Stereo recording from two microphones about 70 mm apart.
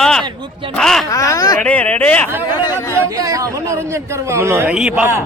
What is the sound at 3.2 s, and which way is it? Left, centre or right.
A man's voice, right.